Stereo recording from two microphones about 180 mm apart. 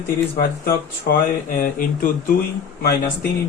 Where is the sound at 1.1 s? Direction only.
60° left (ahead or behind).